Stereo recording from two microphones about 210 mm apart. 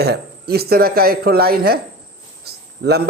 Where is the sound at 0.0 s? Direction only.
50° right (ahead or behind).